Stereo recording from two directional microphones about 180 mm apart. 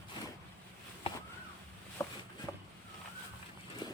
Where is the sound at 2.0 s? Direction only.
15° left (ahead or behind).